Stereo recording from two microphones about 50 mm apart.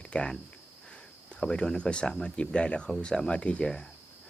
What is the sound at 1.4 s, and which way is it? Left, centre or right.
Speech, centre.